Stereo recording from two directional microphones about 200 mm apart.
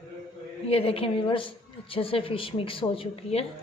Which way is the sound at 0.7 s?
30° left (ahead or behind).